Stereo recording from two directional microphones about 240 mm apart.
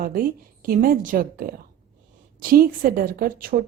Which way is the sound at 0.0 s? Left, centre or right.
Right.